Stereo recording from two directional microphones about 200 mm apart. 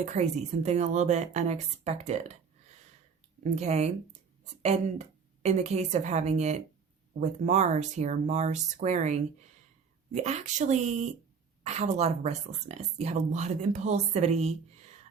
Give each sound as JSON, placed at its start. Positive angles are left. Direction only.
{"t": 0.0, "sound": "speech", "side_deg": -35}
{"t": 3.4, "sound": "speech", "side_deg": -35}